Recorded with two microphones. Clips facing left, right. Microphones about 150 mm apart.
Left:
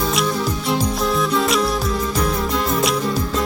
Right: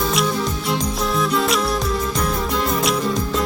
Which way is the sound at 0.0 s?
Centre (ahead or behind).